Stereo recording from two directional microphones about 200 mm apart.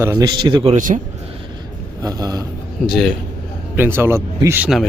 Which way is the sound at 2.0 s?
20° right (ahead or behind).